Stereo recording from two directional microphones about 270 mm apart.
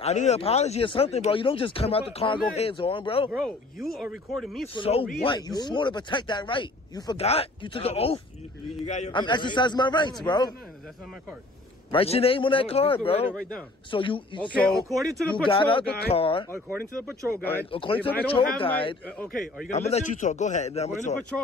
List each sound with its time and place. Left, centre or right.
0.0 s speech: left
3.3 s speech: centre
4.7 s speech: left
11.9 s speech: left
13.3 s speech: centre
13.8 s speech: centre
14.7 s speech: centre
15.4 s speech: centre
16.5 s speech: centre
17.6 s speech: centre
19.0 s speech: centre
19.7 s speech: left